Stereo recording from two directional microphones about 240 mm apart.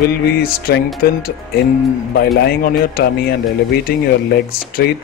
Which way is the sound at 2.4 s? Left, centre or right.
Left.